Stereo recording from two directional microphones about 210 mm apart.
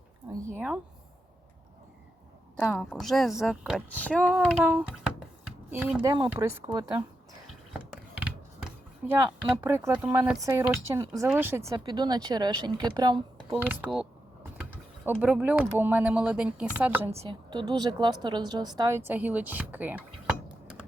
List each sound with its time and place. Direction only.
0.3 s speech: 10° right (ahead or behind)
2.6 s a woman's voice: 10° left (ahead or behind)
3.8 s speech: 5° left (ahead or behind)
6.0 s a woman's voice: 20° right (ahead or behind)
7.7 s a sound: 5° right (ahead or behind)
9.6 s a woman's voice: 10° right (ahead or behind)
13.6 s speech: 10° right (ahead or behind)
17.1 s a woman's voice: 25° right (ahead or behind); by 20.3 s 10° right (ahead or behind)